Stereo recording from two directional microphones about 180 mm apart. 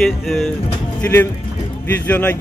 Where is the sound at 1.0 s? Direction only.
10° left (ahead or behind).